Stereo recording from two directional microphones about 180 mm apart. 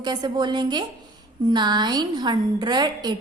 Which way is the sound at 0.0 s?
25° right (ahead or behind).